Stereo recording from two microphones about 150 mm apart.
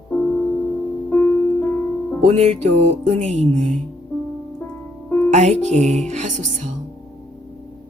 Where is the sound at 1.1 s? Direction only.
15° left (ahead or behind).